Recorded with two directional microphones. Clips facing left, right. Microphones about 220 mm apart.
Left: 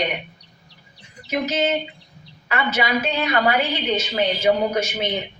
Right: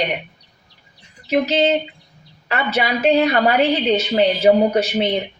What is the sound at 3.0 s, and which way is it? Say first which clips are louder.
A woman's voice: right 6 dB; 35° right (ahead or behind).